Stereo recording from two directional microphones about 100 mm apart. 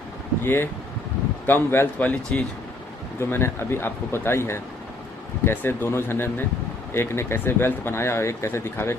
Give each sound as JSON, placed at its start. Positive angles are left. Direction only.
{"t": 0.4, "sound": "speech", "side_deg": 25}